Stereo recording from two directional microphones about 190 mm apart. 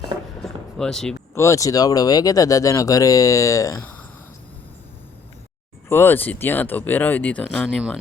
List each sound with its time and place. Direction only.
0.4 s a sound: centre (ahead or behind)
1.4 s speech: 15° left (ahead or behind)
5.9 s speech: 10° left (ahead or behind)